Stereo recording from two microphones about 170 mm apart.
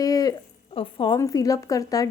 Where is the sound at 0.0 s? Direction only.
20° left (ahead or behind).